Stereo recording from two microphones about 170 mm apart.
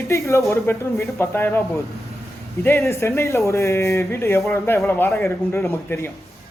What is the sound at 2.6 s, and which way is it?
Speech, 15° left (ahead or behind).